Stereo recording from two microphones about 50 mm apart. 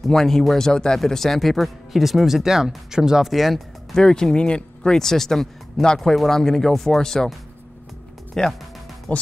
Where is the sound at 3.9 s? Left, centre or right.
Centre.